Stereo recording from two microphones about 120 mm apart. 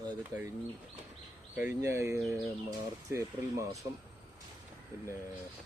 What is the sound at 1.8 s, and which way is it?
Speech, 25° right (ahead or behind).